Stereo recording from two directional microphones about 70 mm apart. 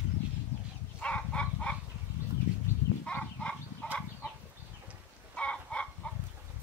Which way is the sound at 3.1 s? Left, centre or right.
Centre.